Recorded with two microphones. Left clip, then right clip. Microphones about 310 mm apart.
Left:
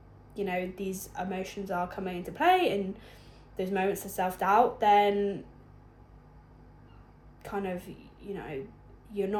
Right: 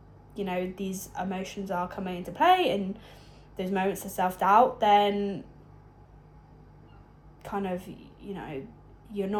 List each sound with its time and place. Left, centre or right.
0.3 s speech: centre
0.9 s a woman's voice: centre
1.1 s speech: centre
7.4 s a woman's voice: centre